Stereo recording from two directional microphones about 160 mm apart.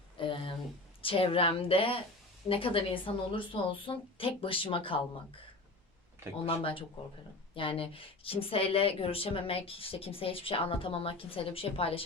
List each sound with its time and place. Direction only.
0.2 s a woman's voice: 30° left (ahead or behind)
6.6 s a woman's voice: 35° left (ahead or behind)